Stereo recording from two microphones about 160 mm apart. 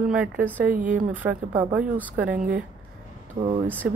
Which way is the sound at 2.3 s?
55° right (ahead or behind).